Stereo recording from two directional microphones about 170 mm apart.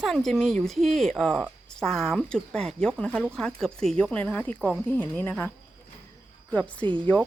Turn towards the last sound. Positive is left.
turn(degrees=-30)  # may be behind; listen again after turning